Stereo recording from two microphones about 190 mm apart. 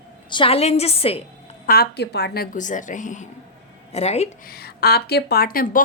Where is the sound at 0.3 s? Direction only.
25° left (ahead or behind).